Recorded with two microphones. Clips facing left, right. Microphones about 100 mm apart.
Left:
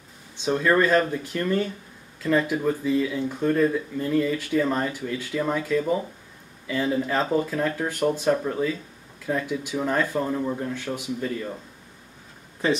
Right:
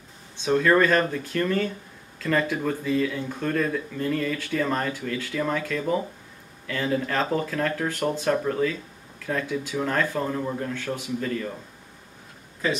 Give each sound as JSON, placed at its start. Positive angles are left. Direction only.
{"t": 0.5, "sound": "speech", "side_deg": 15}
{"t": 10.2, "sound": "speech", "side_deg": 5}
{"t": 10.6, "sound": "speech", "side_deg": 15}